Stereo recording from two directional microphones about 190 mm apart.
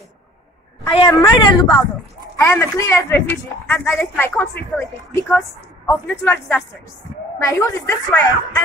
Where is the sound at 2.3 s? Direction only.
15° left (ahead or behind).